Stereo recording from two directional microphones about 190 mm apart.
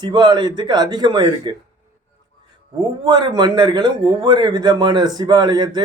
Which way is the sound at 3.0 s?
25° right (ahead or behind).